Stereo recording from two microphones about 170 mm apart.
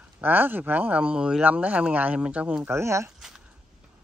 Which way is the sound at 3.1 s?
Centre (ahead or behind).